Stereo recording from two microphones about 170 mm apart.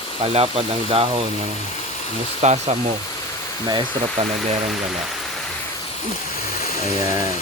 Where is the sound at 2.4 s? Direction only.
40° right (ahead or behind).